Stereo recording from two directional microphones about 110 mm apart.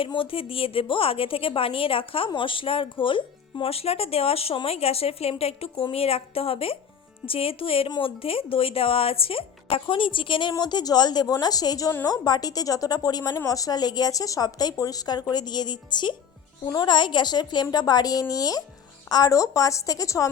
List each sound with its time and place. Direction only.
0.0 s a woman's voice: 55° left (ahead or behind); by 20.3 s 30° left (ahead or behind)